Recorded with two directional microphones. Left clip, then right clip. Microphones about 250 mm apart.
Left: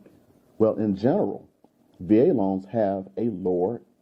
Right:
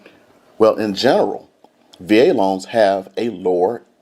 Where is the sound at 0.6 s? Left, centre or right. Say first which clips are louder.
Right 9 dB; centre.